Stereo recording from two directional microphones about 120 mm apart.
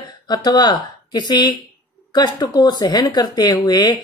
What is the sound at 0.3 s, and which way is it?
A woman's voice, 35° left (ahead or behind).